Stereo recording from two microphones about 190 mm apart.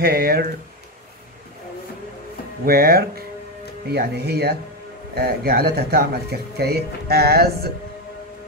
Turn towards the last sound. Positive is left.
turn(degrees=-55)  # may be behind; listen again after turning